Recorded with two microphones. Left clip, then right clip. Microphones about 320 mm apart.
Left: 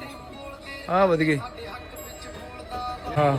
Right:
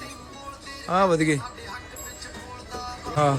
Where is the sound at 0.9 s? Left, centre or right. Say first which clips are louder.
Even; centre.